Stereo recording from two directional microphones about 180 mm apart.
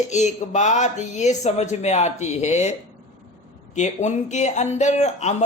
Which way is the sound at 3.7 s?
40° left (ahead or behind).